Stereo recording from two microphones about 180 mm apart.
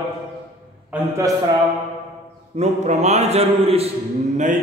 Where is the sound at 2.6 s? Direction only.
40° right (ahead or behind).